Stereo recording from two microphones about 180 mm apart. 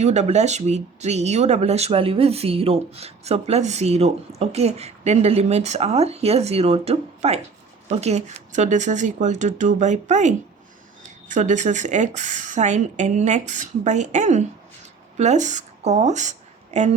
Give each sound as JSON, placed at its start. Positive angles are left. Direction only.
{"t": 0.0, "sound": "speech", "side_deg": -40}